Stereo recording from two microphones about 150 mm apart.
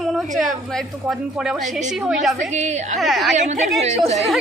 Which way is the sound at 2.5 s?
50° right (ahead or behind).